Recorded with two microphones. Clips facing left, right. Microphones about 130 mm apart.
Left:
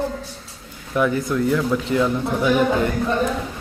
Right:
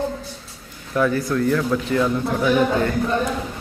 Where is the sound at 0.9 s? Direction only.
15° left (ahead or behind).